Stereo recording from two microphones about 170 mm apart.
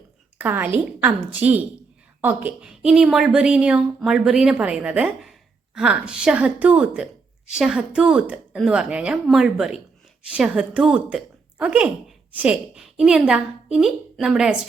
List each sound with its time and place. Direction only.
0.3 s a woman's voice: 10° right (ahead or behind)